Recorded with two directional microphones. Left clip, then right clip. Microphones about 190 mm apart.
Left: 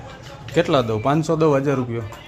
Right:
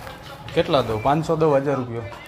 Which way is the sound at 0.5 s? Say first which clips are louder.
Left 1 dB; 45° left (ahead or behind).